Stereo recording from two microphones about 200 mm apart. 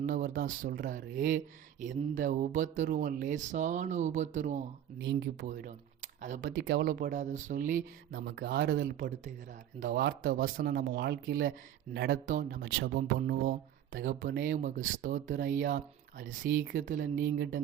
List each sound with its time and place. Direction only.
0.0 s speech: 45° right (ahead or behind)
4.9 s speech: 60° right (ahead or behind)
5.5 s speech: 40° right (ahead or behind)
6.6 s speech: 60° right (ahead or behind); by 7.9 s 40° right (ahead or behind)
8.1 s speech: 50° right (ahead or behind)